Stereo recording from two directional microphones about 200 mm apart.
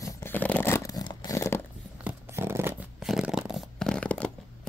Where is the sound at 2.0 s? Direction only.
10° right (ahead or behind).